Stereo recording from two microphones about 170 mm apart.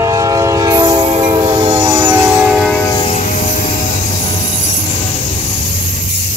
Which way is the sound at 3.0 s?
45° left (ahead or behind).